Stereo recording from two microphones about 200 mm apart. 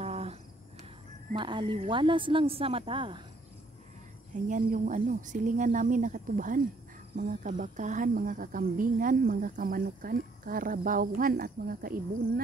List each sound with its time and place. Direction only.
0.0 s cricket: 30° right (ahead or behind)
1.3 s a woman's voice: 25° right (ahead or behind)
4.5 s a woman's voice: 40° right (ahead or behind)